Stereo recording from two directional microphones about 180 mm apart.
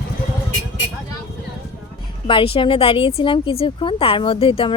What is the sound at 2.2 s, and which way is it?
Speech, 30° left (ahead or behind).